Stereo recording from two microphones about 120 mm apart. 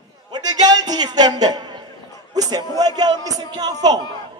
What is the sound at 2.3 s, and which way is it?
A man's voice, 30° right (ahead or behind).